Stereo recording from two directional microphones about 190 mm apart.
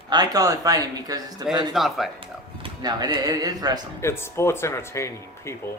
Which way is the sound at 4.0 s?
15° left (ahead or behind).